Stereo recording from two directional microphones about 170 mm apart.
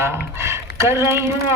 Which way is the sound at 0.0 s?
15° right (ahead or behind).